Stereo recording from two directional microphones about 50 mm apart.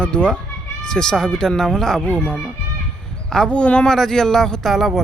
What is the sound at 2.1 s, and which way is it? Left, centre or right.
A man's voice, left.